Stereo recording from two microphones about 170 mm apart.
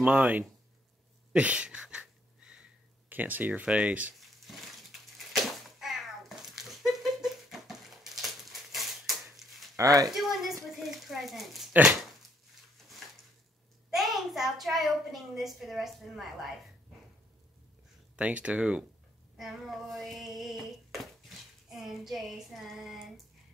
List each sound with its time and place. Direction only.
0.0 s speech: 10° right (ahead or behind)
1.3 s a sound: 5° right (ahead or behind)
5.3 s cat: centre (ahead or behind)
9.8 s speech: 20° right (ahead or behind)
10.1 s a child's voice: centre (ahead or behind)
13.8 s a child's voice: centre (ahead or behind)
18.1 s speech: 5° right (ahead or behind)
19.3 s a sound: centre (ahead or behind)